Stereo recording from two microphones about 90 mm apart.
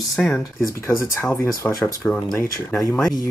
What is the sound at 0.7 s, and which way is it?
Speech, 35° left (ahead or behind).